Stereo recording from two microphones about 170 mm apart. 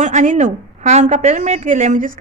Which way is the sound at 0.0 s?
45° right (ahead or behind).